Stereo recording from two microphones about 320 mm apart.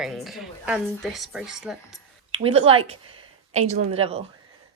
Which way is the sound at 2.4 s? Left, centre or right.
Centre.